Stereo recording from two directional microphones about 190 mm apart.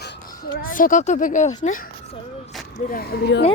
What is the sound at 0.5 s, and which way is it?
A child's voice, 50° left (ahead or behind).